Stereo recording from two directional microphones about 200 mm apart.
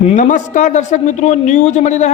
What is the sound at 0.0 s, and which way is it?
Speech, 35° left (ahead or behind).